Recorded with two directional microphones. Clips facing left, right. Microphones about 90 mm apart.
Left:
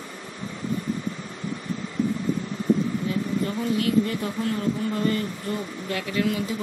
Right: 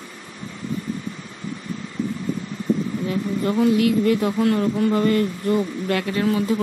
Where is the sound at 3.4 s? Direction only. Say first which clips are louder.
Right 10 dB; 90° right.